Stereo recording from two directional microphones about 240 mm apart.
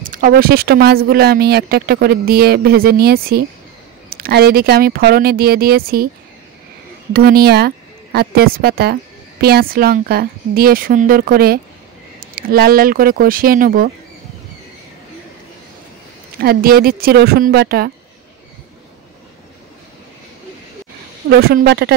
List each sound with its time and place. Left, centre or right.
0.0 s speech: right
7.1 s speech: right
16.3 s speech: right
21.3 s speech: right